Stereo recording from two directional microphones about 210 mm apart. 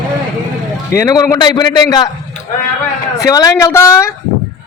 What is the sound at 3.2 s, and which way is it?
Speech, 15° left (ahead or behind).